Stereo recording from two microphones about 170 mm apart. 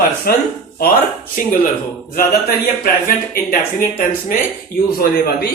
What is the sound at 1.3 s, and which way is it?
Speech, 55° left (ahead or behind).